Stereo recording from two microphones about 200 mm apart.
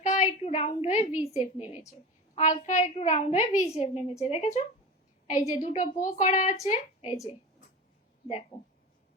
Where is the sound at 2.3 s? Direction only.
35° left (ahead or behind).